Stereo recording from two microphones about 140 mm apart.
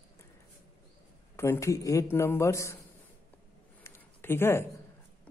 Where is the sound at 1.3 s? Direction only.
15° left (ahead or behind).